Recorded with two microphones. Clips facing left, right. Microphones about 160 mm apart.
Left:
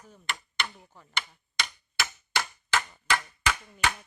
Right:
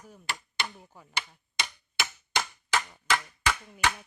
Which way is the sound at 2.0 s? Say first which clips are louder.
Even; 20° right (ahead or behind).